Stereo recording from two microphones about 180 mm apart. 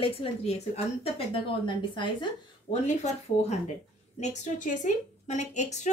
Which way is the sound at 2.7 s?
40° left (ahead or behind).